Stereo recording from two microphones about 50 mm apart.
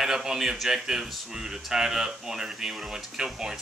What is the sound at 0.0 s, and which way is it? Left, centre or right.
A man's voice, centre.